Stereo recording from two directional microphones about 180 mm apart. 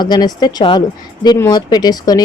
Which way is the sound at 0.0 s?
25° left (ahead or behind).